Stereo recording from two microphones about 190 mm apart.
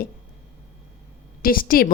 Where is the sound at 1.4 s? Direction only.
50° left (ahead or behind).